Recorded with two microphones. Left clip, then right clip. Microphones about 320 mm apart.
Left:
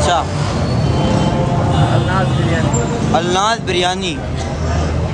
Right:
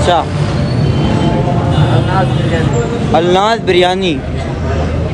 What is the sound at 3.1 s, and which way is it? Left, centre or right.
Speech, centre.